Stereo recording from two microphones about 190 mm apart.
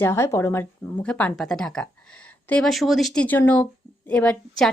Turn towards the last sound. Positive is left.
turn(degrees=5)  # may be behind; listen again after turning